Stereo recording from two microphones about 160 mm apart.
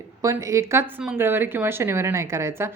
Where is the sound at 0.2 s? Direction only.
20° right (ahead or behind).